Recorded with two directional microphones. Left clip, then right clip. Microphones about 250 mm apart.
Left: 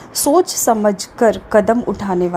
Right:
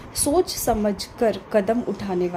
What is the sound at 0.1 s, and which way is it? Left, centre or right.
A woman's voice, left.